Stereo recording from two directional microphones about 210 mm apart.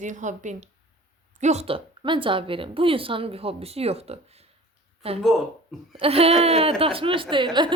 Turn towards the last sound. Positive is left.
turn(degrees=-25)  # may be behind; listen again after turning